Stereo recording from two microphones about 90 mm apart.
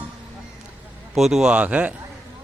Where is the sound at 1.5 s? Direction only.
15° right (ahead or behind).